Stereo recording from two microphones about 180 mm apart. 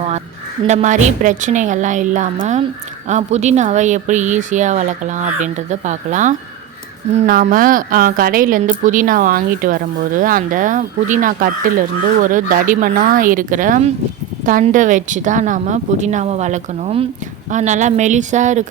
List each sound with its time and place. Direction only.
0.7 s a woman's voice: 45° right (ahead or behind)
7.3 s a woman's voice: 55° right (ahead or behind)